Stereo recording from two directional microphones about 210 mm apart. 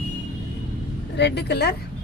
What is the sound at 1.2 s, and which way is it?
Speech, 55° left (ahead or behind).